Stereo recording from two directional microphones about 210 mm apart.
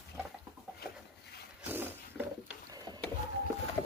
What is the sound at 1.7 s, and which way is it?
Roaring cats, 10° right (ahead or behind).